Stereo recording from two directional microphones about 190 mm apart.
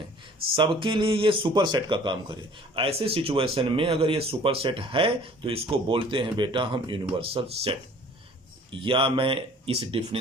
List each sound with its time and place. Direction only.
0.5 s speech: 25° right (ahead or behind)
8.8 s speech: 25° right (ahead or behind)